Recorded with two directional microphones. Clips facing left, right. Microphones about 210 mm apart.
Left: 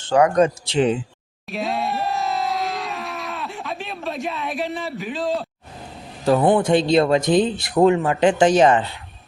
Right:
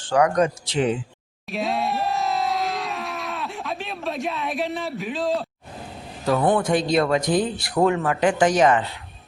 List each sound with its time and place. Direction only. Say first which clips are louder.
0.0 s speech: left 3 dB; 25° left (ahead or behind)
1.5 s crowd: even; centre (ahead or behind)
6.2 s a man's voice: left 4 dB; 30° left (ahead or behind)